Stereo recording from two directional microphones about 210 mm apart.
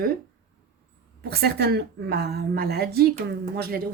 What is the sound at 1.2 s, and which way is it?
A woman's voice, 50° right (ahead or behind).